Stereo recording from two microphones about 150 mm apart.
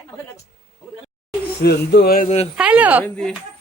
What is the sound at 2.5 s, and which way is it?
Speech, 10° right (ahead or behind).